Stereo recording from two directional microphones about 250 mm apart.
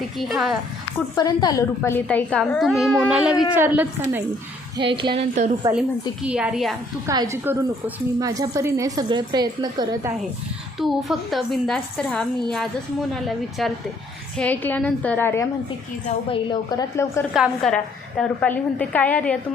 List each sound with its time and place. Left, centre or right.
0.2 s a woman's voice: centre
1.1 s a woman's voice: centre
4.8 s speech: centre
6.2 s a woman's voice: centre
7.1 s a woman's voice: centre
10.8 s a woman's voice: centre
13.6 s a woman's voice: centre
17.3 s a woman's voice: centre